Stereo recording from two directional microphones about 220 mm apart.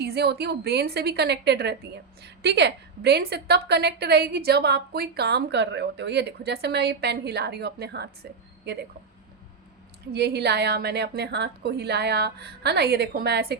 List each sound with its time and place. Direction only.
0.0 s a woman's voice: 45° right (ahead or behind)
10.1 s a woman's voice: 50° right (ahead or behind)